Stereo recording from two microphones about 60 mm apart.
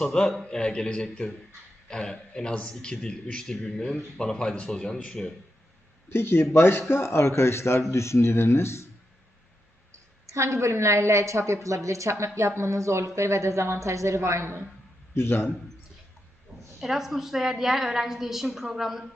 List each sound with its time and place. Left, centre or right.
0.0 s a man's voice: centre
6.1 s a man's voice: left
10.2 s a woman's voice: right
15.1 s a man's voice: left
16.5 s a sound: centre
16.8 s a woman's voice: centre